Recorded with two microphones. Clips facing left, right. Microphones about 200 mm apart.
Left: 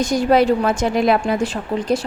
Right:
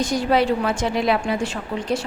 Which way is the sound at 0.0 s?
45° left (ahead or behind).